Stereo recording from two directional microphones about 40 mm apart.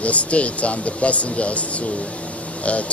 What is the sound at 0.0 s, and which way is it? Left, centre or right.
Speech, left.